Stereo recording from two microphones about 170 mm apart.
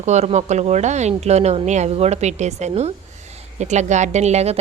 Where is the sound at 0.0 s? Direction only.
40° right (ahead or behind).